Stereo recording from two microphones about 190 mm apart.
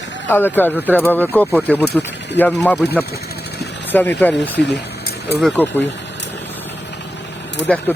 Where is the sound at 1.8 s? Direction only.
60° left (ahead or behind).